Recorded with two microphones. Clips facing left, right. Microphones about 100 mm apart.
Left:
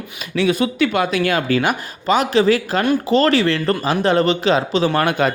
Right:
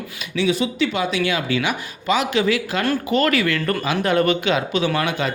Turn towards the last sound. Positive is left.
turn(degrees=50)  # may be behind; listen again after turning